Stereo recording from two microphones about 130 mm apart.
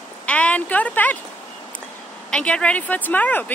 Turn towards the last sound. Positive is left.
turn(degrees=10)  # may be behind; listen again after turning